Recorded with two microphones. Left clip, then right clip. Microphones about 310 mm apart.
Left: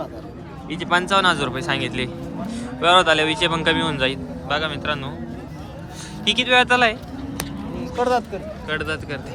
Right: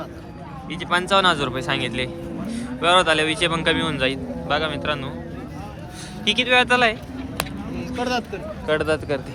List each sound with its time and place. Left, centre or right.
0.8 s speech: centre
6.2 s speech: centre
7.9 s speech: centre
8.6 s speech: centre